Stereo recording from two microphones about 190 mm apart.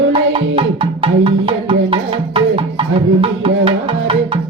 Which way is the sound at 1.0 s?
25° right (ahead or behind).